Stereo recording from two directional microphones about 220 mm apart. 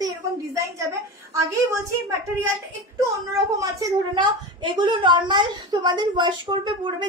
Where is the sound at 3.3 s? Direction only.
15° right (ahead or behind).